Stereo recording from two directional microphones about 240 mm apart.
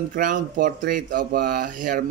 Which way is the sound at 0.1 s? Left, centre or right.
Right.